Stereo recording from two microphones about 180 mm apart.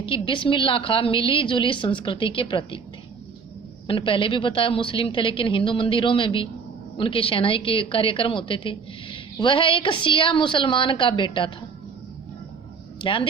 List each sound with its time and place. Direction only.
0.0 s a woman's voice: 30° left (ahead or behind)
3.8 s a woman's voice: 30° left (ahead or behind)
13.0 s speech: 30° left (ahead or behind)